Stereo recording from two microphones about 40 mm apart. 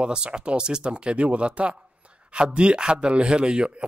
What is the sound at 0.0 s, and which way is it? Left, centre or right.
Speech, right.